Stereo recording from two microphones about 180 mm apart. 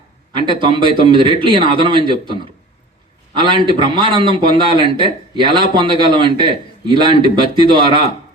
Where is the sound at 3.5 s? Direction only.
25° right (ahead or behind).